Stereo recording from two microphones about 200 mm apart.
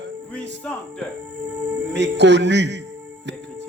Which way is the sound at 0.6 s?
5° left (ahead or behind).